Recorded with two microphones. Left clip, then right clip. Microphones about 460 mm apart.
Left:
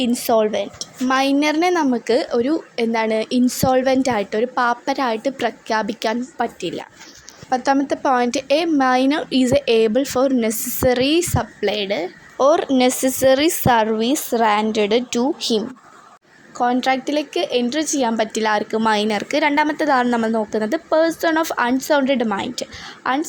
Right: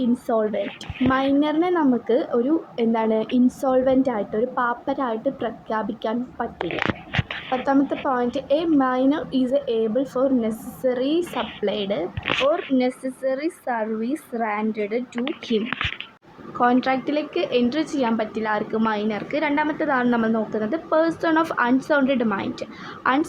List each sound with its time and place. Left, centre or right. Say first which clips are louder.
0.0 s a woman's voice: left 5 dB; right
7.5 s a woman's voice: left 4 dB; right